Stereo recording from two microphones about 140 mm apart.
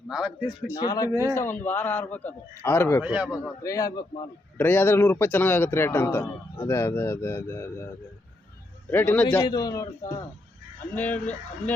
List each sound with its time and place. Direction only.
0.1 s a man's voice: 5° right (ahead or behind)
0.7 s speech: 25° left (ahead or behind)
1.3 s a man's voice: 15° left (ahead or behind)
3.0 s a man's voice: 5° right (ahead or behind)
3.2 s a man's voice: 20° left (ahead or behind)
8.9 s a man's voice: 15° left (ahead or behind)
9.4 s speech: 30° left (ahead or behind)
10.9 s a man's voice: 10° left (ahead or behind)